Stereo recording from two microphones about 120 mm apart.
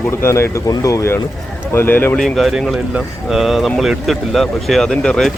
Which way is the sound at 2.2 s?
Centre (ahead or behind).